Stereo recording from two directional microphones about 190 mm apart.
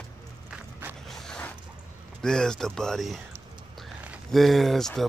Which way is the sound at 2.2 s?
5° left (ahead or behind).